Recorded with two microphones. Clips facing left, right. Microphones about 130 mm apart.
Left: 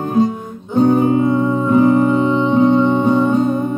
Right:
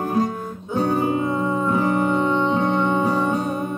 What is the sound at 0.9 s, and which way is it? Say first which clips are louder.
Music: left 7 dB; centre (ahead or behind).